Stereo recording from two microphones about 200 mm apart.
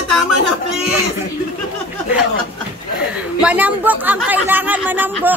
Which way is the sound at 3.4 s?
5° right (ahead or behind).